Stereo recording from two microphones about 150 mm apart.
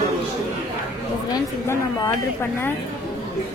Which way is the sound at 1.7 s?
15° left (ahead or behind).